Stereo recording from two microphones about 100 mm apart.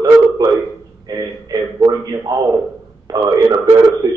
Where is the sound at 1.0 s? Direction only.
40° right (ahead or behind).